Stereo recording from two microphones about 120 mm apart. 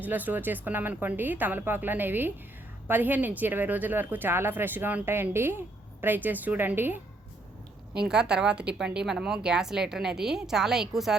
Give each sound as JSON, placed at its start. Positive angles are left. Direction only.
{"t": 0.0, "sound": "speech", "side_deg": -15}
{"t": 7.9, "sound": "a woman's voice", "side_deg": -5}